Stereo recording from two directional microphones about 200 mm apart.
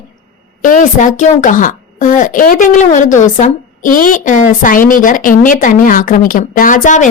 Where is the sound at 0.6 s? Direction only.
40° left (ahead or behind).